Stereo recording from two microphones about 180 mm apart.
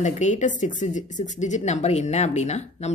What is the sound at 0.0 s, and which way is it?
A woman's voice, 40° left (ahead or behind).